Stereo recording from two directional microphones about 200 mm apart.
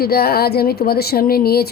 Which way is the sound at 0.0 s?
50° left (ahead or behind).